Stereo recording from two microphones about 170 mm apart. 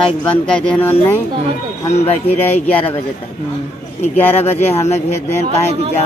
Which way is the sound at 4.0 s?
10° left (ahead or behind).